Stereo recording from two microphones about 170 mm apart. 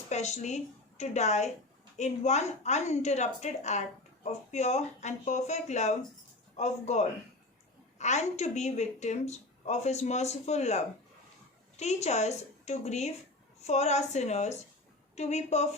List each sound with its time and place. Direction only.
0.1 s a woman's voice: 40° left (ahead or behind)